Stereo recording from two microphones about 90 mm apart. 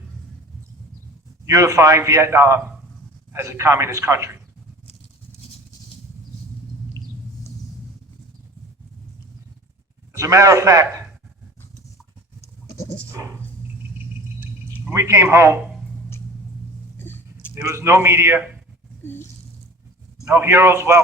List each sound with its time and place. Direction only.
1.5 s a man's voice: 35° right (ahead or behind)
7.0 s a sound: 35° right (ahead or behind)
10.1 s a man's voice: 35° right (ahead or behind)
13.1 s a man's voice: 30° right (ahead or behind)
14.0 s a sound: 20° right (ahead or behind)
14.9 s a man's voice: 30° right (ahead or behind)
17.0 s a sound: 25° left (ahead or behind)
17.5 s a man's voice: 30° right (ahead or behind)
19.0 s speech: 25° left (ahead or behind)
20.3 s a man's voice: 25° right (ahead or behind)